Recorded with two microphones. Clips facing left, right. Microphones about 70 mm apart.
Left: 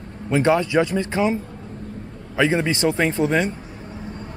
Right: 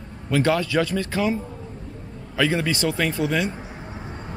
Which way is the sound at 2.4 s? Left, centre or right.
Left.